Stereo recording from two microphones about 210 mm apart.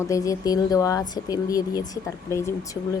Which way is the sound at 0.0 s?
15° left (ahead or behind).